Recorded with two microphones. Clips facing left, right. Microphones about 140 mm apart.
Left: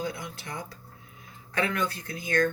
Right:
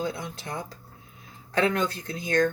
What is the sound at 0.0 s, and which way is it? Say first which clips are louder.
Speech: right 3 dB; 25° right (ahead or behind).